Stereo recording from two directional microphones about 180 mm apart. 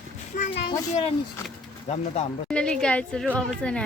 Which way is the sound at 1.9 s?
35° left (ahead or behind).